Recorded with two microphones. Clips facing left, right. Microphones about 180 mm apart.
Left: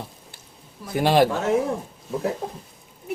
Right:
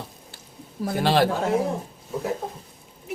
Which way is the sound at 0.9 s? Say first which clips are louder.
Left 3 dB; 15° left (ahead or behind).